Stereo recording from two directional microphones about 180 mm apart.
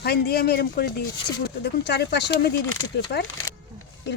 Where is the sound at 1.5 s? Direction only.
70° left (ahead or behind).